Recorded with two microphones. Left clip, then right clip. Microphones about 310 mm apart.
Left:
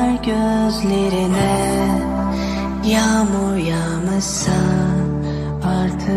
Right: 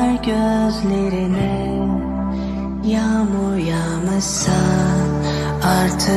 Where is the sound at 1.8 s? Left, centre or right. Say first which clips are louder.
Left 3 dB; left.